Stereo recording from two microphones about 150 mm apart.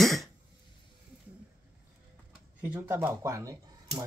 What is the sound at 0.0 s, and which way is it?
Cough, centre (ahead or behind).